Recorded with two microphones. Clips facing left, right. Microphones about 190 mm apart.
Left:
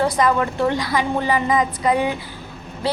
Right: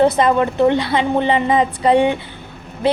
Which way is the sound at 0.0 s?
25° right (ahead or behind).